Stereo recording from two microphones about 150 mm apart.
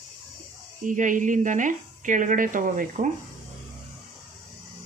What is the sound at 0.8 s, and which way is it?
A woman's voice, 60° right (ahead or behind).